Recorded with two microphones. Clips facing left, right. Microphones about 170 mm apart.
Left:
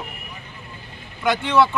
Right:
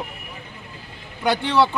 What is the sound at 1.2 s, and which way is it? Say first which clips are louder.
Speech: even; 35° right (ahead or behind).